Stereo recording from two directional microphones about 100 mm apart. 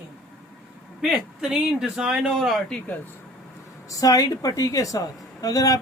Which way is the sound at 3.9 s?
40° left (ahead or behind).